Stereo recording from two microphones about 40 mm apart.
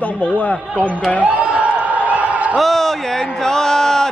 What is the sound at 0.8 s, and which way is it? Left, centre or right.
Speech, left.